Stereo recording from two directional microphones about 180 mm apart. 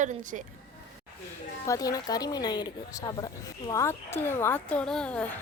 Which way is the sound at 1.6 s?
20° left (ahead or behind).